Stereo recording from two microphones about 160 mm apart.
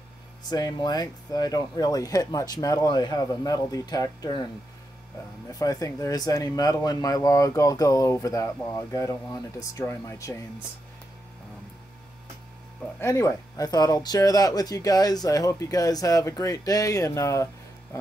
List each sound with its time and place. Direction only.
0.5 s speech: 25° left (ahead or behind)
5.5 s speech: 20° left (ahead or behind)
13.0 s speech: 20° left (ahead or behind)